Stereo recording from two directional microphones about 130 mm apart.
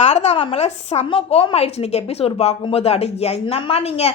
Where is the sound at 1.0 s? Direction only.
45° left (ahead or behind).